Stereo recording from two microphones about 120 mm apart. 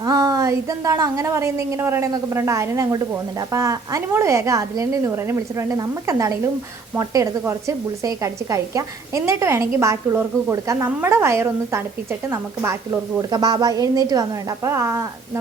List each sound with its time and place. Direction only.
0.0 s a woman's voice: 30° right (ahead or behind)